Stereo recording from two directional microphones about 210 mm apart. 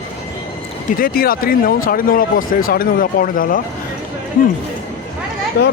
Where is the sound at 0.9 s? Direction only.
45° left (ahead or behind).